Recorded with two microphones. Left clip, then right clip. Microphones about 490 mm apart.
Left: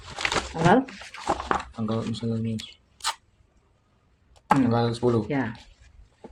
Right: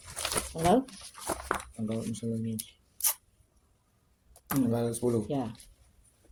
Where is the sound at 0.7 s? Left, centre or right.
Right.